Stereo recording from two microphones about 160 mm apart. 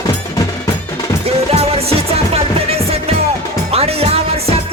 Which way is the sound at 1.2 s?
40° right (ahead or behind).